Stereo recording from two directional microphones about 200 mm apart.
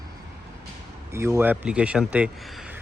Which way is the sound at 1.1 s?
15° right (ahead or behind).